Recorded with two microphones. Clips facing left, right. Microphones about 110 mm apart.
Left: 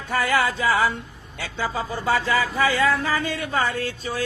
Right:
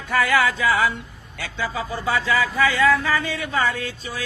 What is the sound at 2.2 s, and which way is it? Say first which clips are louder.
Music: right 1 dB; 40° left (ahead or behind).